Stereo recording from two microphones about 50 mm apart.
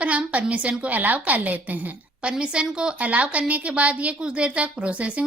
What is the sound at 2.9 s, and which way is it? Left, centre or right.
A woman's voice, right.